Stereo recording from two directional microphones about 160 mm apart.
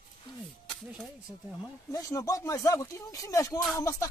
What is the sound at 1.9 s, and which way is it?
Speech, 20° left (ahead or behind).